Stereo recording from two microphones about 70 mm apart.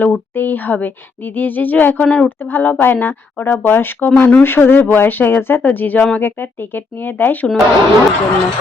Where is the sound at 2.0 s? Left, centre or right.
Centre.